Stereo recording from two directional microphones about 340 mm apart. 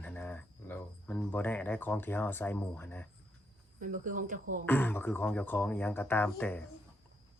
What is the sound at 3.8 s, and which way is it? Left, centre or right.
Speech, right.